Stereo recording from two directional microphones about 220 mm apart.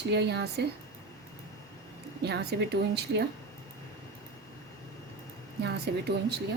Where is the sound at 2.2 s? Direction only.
50° right (ahead or behind).